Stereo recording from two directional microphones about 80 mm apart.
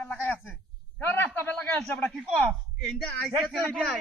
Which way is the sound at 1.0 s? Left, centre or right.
Left.